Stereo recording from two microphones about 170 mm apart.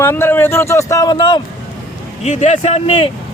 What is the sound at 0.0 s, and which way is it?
A man's voice, 15° left (ahead or behind).